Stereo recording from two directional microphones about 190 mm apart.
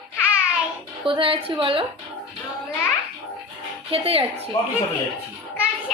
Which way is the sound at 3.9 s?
30° right (ahead or behind).